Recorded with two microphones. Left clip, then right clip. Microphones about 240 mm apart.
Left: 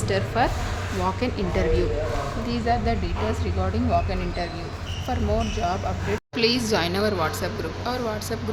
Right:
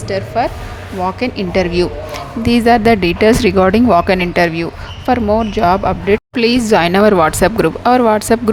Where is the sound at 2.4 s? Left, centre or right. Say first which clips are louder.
Right 16 dB; right.